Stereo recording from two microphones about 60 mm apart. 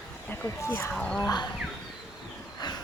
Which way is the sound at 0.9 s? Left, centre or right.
Centre.